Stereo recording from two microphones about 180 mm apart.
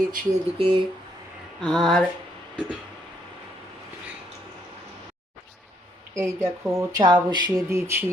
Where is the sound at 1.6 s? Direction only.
5° left (ahead or behind).